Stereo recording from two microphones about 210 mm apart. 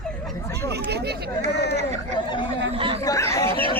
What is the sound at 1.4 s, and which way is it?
Speech, 50° left (ahead or behind).